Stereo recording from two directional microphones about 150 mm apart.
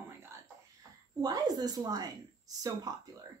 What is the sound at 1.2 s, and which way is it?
Speech, 25° right (ahead or behind).